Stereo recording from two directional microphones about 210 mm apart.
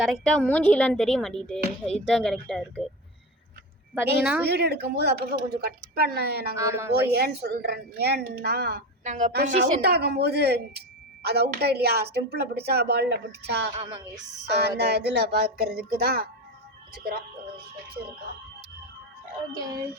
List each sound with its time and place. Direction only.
0.0 s speech: 5° left (ahead or behind)
4.2 s speech: 5° right (ahead or behind)
4.4 s speech: 50° right (ahead or behind)
6.6 s speech: 15° right (ahead or behind)
6.9 s speech: 50° right (ahead or behind)
9.0 s a woman's voice: 35° right (ahead or behind)
9.3 s speech: 50° right (ahead or behind)
13.7 s a woman's voice: 25° right (ahead or behind)
14.5 s speech: 50° right (ahead or behind)